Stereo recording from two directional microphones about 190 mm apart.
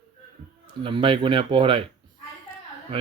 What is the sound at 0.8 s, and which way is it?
Speech, 25° right (ahead or behind).